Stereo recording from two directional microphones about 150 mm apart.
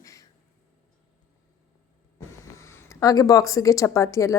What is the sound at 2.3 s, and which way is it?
Speech, 20° left (ahead or behind).